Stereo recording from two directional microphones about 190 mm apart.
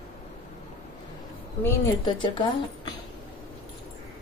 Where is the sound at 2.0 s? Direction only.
25° left (ahead or behind).